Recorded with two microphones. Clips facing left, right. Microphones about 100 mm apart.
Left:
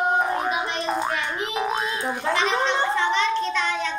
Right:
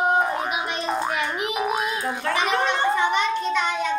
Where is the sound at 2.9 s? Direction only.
10° right (ahead or behind).